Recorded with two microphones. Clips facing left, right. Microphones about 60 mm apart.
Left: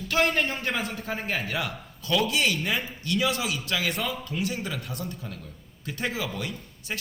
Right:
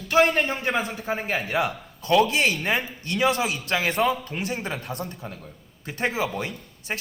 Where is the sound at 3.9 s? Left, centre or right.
Right.